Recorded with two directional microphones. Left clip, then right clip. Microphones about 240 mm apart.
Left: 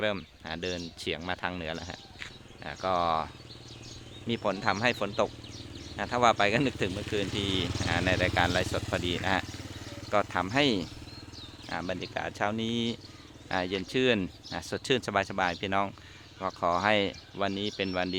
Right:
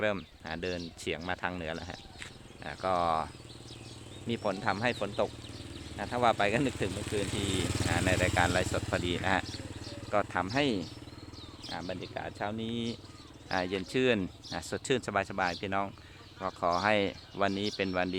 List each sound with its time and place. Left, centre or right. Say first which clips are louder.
0.0 s speech: left 1 dB; centre
4.3 s speech: left 3 dB; centre
7.0 s speech: left 2 dB; right
7.9 s speech: left 2 dB; centre